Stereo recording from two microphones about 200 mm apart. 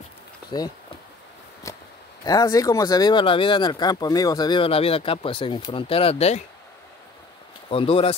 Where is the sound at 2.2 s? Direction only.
15° left (ahead or behind).